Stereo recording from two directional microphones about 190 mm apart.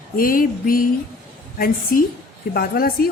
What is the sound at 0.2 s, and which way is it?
Speech, 50° left (ahead or behind).